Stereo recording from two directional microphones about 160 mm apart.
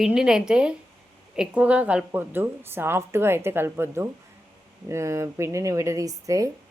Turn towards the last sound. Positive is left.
turn(degrees=-20)  # may be behind; listen again after turning